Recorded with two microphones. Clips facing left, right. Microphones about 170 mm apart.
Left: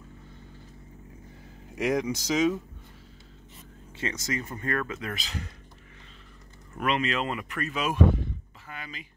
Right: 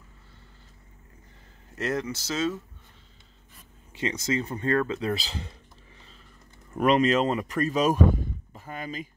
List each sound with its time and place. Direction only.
1.8 s speech: 15° left (ahead or behind)
4.0 s speech: 25° right (ahead or behind)
6.8 s speech: 40° right (ahead or behind)